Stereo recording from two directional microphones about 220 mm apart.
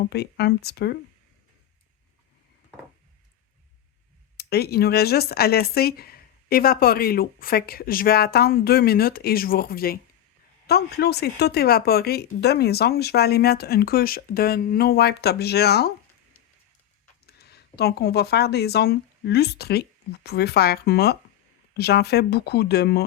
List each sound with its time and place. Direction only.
0.1 s speech: 45° left (ahead or behind)
4.4 s speech: 45° left (ahead or behind)
17.2 s speech: 45° left (ahead or behind)